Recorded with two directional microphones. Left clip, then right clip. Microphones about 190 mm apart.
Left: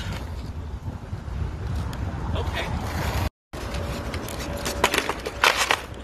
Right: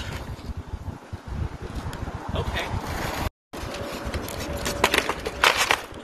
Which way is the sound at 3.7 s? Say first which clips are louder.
Right 1 dB; 5° left (ahead or behind).